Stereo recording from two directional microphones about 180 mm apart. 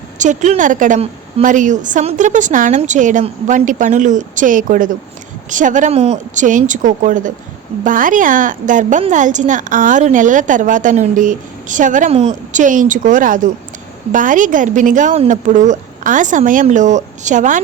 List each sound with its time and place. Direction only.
0.2 s a woman's voice: 40° right (ahead or behind)